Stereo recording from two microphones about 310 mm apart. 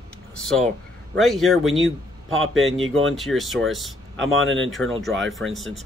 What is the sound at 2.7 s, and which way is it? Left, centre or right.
Speech, right.